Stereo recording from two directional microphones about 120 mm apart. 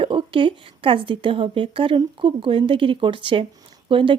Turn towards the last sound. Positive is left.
turn(degrees=-45)  # may be behind; listen again after turning